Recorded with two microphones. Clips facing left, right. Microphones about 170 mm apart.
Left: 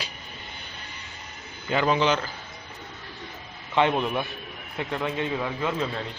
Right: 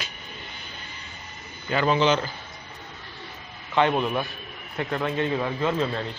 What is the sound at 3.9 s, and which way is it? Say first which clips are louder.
Speech: right 1 dB; centre (ahead or behind).